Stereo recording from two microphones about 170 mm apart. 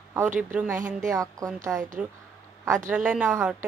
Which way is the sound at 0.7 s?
50° right (ahead or behind).